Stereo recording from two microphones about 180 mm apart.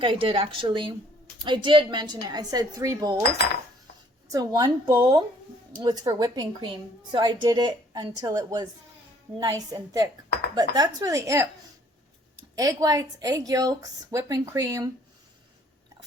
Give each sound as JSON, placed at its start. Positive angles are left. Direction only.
{"t": 0.0, "sound": "a woman's voice", "side_deg": -30}
{"t": 4.3, "sound": "a woman's voice", "side_deg": -20}
{"t": 12.5, "sound": "a woman's voice", "side_deg": -20}